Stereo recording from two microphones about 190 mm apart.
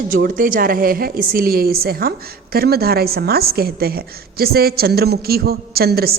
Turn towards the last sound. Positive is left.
turn(degrees=-55)  # may be behind; listen again after turning